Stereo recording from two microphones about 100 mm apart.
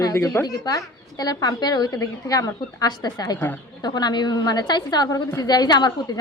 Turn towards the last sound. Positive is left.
turn(degrees=45)  # may be behind; listen again after turning